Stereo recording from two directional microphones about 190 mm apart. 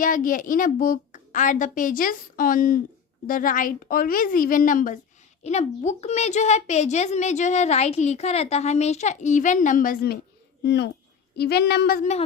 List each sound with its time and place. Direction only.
0.0 s a woman's voice: 45° left (ahead or behind)
10.6 s speech: 60° left (ahead or behind)